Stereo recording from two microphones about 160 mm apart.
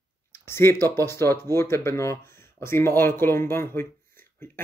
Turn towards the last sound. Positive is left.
turn(degrees=15)  # may be behind; listen again after turning